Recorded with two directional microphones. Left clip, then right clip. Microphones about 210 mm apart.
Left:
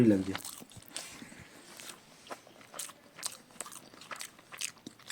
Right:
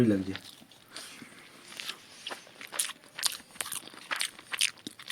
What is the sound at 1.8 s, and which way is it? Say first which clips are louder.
Biting: right 13 dB; centre (ahead or behind).